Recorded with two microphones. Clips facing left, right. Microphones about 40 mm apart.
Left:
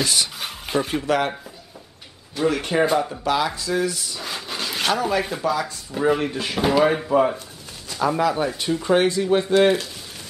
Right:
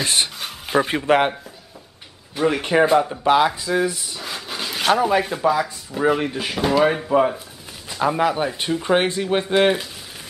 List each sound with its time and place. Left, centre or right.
0.0 s speech: right
0.4 s a sound: centre
0.8 s speech: right
2.3 s speech: centre
4.2 s wood: centre
4.9 s speech: centre
8.0 s speech: right